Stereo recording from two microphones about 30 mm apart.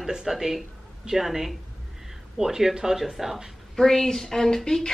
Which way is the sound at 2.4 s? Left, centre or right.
Right.